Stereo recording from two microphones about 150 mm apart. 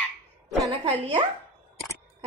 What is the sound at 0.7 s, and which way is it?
Speech, 40° right (ahead or behind).